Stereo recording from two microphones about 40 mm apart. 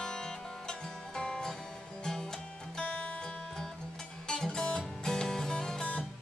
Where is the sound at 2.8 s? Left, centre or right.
Left.